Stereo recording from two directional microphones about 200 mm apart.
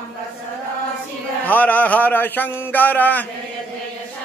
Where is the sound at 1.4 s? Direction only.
10° left (ahead or behind).